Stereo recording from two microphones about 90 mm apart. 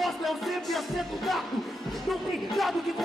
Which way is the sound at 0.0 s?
Centre (ahead or behind).